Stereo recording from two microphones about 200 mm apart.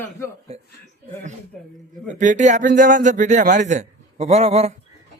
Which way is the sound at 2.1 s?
40° right (ahead or behind).